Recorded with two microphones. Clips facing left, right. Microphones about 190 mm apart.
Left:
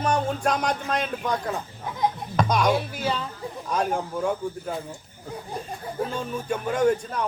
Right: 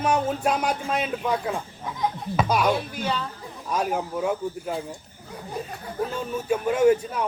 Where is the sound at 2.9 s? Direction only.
10° left (ahead or behind).